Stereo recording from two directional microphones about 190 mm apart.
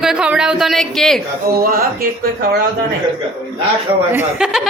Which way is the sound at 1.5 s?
50° right (ahead or behind).